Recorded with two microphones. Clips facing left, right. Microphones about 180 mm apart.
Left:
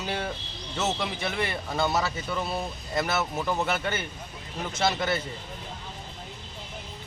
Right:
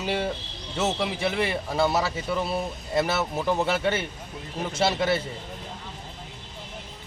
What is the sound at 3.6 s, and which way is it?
Speech, 30° right (ahead or behind).